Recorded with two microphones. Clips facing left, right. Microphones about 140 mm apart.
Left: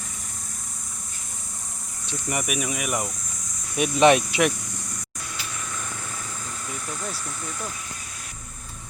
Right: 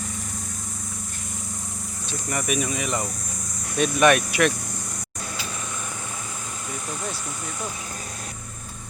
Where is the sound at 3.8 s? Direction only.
20° left (ahead or behind).